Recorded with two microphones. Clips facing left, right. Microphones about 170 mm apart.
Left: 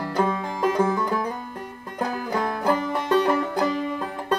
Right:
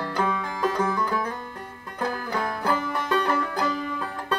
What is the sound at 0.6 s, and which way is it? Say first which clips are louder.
Music: left 4 dB; 25° left (ahead or behind).